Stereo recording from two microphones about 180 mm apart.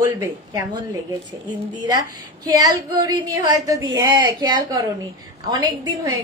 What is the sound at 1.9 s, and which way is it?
A woman's voice, 20° right (ahead or behind).